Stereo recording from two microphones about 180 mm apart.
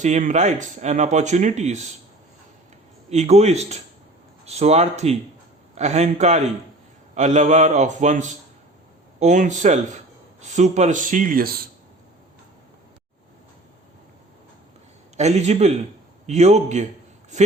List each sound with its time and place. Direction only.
0.0 s speech: 45° right (ahead or behind)
3.1 s speech: 35° right (ahead or behind); by 11.6 s 55° right (ahead or behind)
15.1 s a man's voice: 40° right (ahead or behind)